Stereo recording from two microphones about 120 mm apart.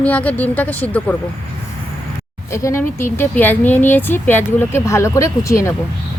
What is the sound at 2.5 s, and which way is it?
Speech, 25° left (ahead or behind).